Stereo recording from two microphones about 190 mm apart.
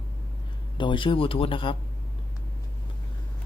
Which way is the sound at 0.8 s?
25° left (ahead or behind).